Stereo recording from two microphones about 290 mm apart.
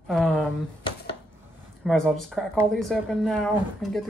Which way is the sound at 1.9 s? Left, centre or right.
Centre.